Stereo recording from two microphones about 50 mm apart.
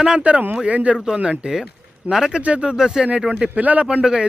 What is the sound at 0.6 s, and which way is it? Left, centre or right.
Speech, right.